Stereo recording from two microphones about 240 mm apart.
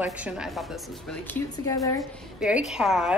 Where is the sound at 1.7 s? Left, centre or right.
Centre.